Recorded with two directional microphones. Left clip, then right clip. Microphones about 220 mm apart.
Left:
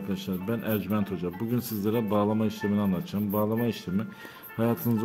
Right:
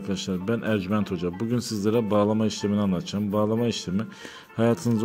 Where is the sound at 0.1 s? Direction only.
20° right (ahead or behind).